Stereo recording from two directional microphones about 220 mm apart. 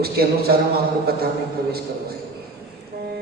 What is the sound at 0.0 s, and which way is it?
A man's voice, 45° right (ahead or behind).